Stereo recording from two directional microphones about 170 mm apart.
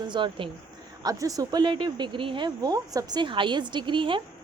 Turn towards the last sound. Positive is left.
turn(degrees=-30)  # may be behind; listen again after turning